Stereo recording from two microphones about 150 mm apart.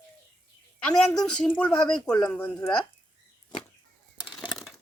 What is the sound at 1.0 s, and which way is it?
A woman's voice, 5° left (ahead or behind).